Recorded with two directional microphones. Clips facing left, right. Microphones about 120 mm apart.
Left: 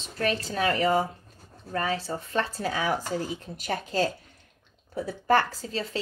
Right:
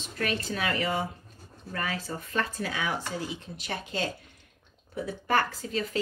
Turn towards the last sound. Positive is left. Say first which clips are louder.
# right 1 dB
turn(degrees=30)  # may be behind; listen again after turning